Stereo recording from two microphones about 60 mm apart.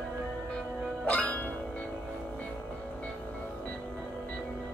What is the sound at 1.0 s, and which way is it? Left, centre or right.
Music, left.